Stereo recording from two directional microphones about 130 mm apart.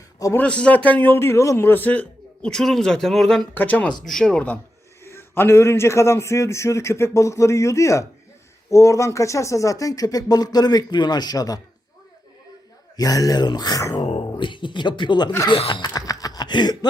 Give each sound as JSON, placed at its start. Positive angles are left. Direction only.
{"t": 0.3, "sound": "a man's voice", "side_deg": 10}
{"t": 3.5, "sound": "a man's voice", "side_deg": 15}
{"t": 5.0, "sound": "a man's voice", "side_deg": 20}
{"t": 13.0, "sound": "a man's voice", "side_deg": 30}
{"t": 14.0, "sound": "a sound", "side_deg": 50}
{"t": 14.3, "sound": "speech", "side_deg": 40}
{"t": 15.4, "sound": "laughter", "side_deg": 40}